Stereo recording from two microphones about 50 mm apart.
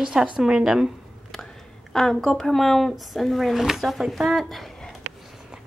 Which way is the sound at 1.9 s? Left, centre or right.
Centre.